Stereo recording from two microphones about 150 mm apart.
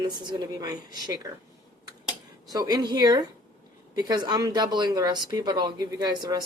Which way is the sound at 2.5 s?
25° right (ahead or behind).